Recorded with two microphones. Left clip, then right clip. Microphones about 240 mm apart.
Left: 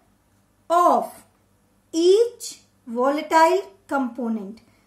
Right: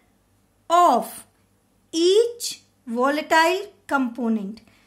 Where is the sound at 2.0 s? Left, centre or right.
Right.